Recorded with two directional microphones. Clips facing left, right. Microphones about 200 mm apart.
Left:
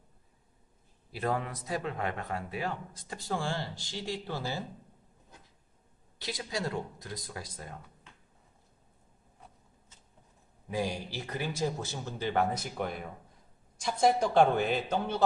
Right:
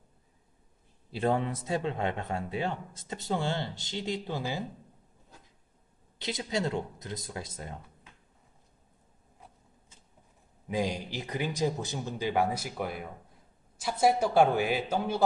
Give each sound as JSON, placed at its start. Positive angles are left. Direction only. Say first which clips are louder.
{"t": 1.1, "sound": "speech", "louder": "right 4 dB", "side_deg": -25}
{"t": 6.1, "sound": "speech", "louder": "right 4 dB", "side_deg": -20}
{"t": 10.7, "sound": "speech", "louder": "right 2 dB", "side_deg": -15}